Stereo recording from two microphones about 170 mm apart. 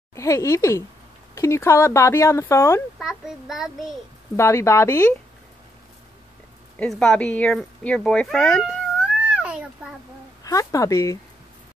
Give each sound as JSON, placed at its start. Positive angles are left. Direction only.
{"t": 0.1, "sound": "speech", "side_deg": 20}
{"t": 3.0, "sound": "a child's voice", "side_deg": 0}
{"t": 4.4, "sound": "speech", "side_deg": 15}
{"t": 6.8, "sound": "speech", "side_deg": 5}
{"t": 9.3, "sound": "a sound", "side_deg": -5}
{"t": 10.4, "sound": "speech", "side_deg": 20}